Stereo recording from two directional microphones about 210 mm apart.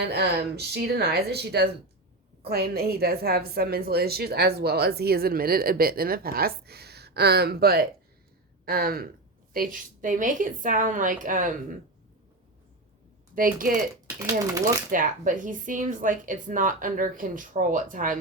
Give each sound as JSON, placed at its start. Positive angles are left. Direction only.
{"t": 0.1, "sound": "a woman's voice", "side_deg": -50}
{"t": 13.3, "sound": "speech", "side_deg": -40}
{"t": 14.2, "sound": "speech", "side_deg": -15}
{"t": 14.8, "sound": "speech", "side_deg": -40}